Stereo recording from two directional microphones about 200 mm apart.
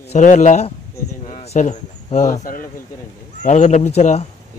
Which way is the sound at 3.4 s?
35° left (ahead or behind).